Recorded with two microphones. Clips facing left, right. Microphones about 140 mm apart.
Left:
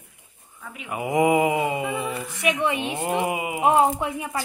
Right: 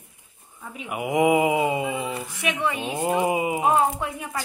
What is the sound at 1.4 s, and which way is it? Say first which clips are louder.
Mantra: right 1 dB; 15° right (ahead or behind).